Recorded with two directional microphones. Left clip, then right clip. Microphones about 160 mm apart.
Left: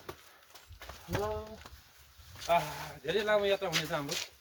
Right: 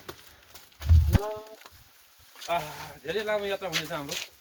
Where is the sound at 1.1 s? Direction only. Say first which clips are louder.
Right 1 dB; 65° right (ahead or behind).